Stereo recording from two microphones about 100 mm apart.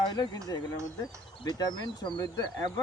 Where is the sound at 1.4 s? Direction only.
45° left (ahead or behind).